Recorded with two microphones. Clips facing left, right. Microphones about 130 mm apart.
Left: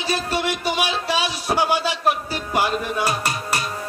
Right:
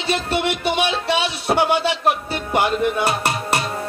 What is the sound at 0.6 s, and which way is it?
Speech, 25° right (ahead or behind).